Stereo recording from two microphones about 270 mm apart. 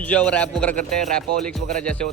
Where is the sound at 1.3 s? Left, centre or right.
Right.